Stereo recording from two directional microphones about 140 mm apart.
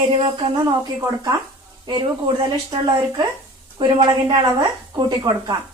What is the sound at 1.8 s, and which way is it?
Speech, 35° right (ahead or behind).